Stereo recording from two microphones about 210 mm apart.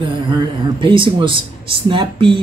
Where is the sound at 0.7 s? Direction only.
25° right (ahead or behind).